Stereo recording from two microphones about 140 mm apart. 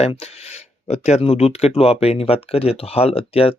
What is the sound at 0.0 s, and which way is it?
Speech, 50° left (ahead or behind).